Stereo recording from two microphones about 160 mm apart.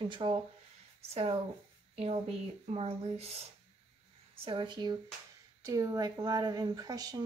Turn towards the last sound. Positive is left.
turn(degrees=-25)  # may be behind; listen again after turning